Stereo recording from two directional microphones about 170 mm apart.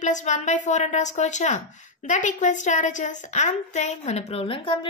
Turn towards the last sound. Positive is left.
turn(degrees=30)  # may be behind; listen again after turning